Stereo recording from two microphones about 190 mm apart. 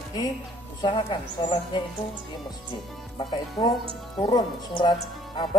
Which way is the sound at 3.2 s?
25° left (ahead or behind).